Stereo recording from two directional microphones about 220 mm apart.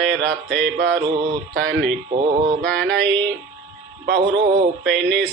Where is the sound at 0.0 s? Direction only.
5° left (ahead or behind).